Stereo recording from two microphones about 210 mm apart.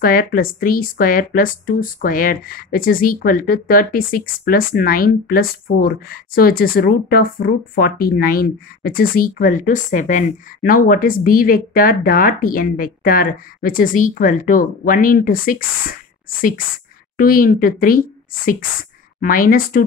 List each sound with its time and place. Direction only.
0.0 s speech: 45° left (ahead or behind)